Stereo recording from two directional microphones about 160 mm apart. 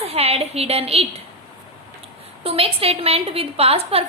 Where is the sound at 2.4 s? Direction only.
35° right (ahead or behind).